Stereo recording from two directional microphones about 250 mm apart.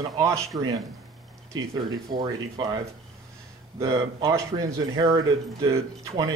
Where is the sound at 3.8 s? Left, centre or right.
Centre.